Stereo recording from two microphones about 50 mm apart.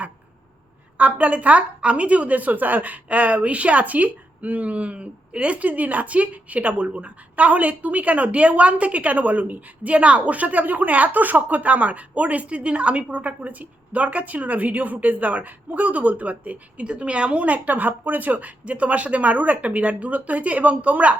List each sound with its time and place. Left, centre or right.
0.9 s a woman's voice: right